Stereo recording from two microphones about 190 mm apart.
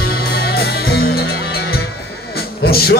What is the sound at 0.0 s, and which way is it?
Music, 55° left (ahead or behind).